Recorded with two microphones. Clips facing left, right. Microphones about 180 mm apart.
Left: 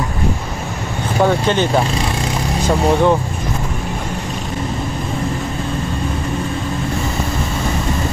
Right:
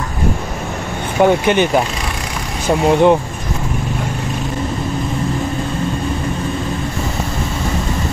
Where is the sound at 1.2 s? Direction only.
15° right (ahead or behind).